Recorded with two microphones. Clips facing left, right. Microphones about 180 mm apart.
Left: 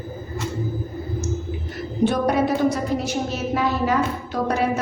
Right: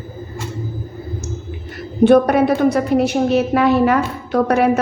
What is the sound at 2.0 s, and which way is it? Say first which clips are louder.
A woman's voice: right 8 dB; 65° right (ahead or behind).